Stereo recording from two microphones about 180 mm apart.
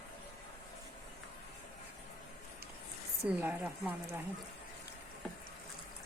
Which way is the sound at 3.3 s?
5° right (ahead or behind).